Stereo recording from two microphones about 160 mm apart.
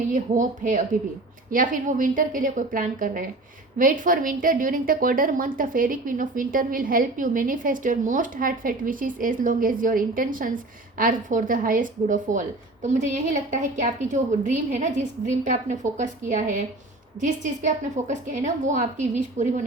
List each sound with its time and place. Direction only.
0.1 s a woman's voice: 55° right (ahead or behind)